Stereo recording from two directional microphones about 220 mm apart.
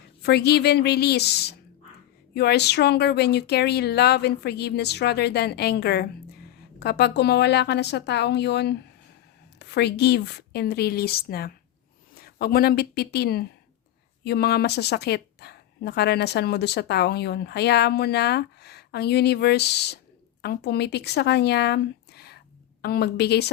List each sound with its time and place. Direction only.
0.2 s a woman's voice: 50° left (ahead or behind)